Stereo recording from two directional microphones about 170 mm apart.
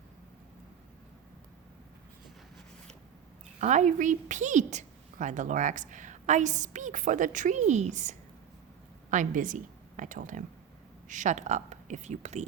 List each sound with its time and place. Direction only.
3.6 s a woman's voice: 45° right (ahead or behind)